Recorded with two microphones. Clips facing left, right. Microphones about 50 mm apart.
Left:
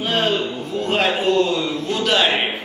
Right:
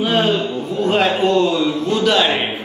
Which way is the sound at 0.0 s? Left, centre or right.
Centre.